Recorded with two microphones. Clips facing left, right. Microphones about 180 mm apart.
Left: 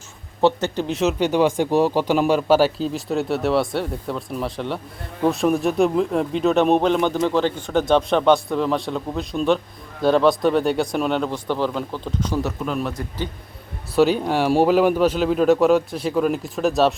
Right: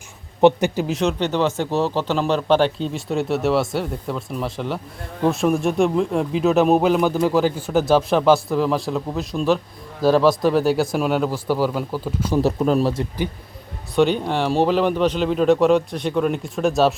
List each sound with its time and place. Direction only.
0.4 s speech: 15° right (ahead or behind)
0.9 s speech: centre (ahead or behind)
12.4 s speech: 35° right (ahead or behind)
13.9 s speech: 5° left (ahead or behind)